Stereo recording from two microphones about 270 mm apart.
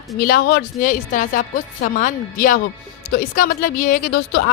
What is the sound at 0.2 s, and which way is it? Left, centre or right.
A woman's voice, left.